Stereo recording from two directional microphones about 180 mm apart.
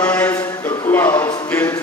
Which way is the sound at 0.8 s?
15° left (ahead or behind).